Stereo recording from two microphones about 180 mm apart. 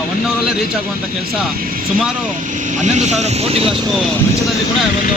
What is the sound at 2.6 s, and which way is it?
Speech, 40° right (ahead or behind).